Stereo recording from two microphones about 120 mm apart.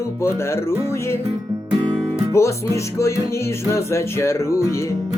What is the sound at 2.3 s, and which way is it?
Music, 25° left (ahead or behind).